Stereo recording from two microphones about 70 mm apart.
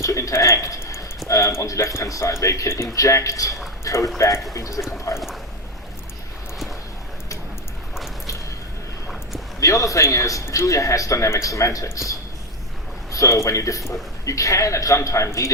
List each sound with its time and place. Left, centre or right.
0.0 s a man's voice: left
9.6 s a man's voice: left